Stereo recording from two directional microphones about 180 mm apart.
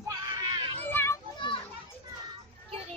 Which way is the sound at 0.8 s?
15° left (ahead or behind).